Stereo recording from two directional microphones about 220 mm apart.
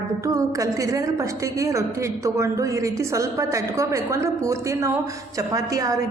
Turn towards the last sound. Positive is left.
turn(degrees=-15)  # may be behind; listen again after turning